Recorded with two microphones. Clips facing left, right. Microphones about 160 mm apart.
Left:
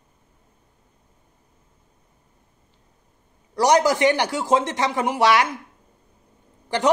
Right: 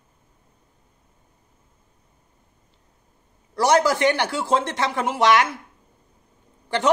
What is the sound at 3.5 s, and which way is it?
Speech, 15° left (ahead or behind).